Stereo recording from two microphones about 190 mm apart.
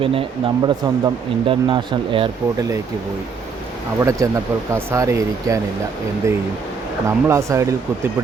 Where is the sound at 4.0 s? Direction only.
15° right (ahead or behind).